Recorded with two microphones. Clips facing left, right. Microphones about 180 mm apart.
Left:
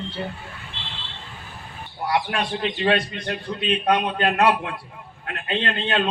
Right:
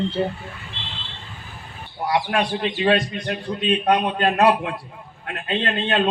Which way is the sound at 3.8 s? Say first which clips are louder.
Right 1 dB; 20° right (ahead or behind).